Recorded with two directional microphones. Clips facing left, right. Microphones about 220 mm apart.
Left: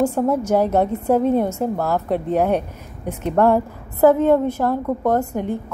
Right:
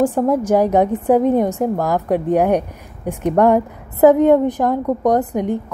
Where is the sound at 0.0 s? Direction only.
15° right (ahead or behind).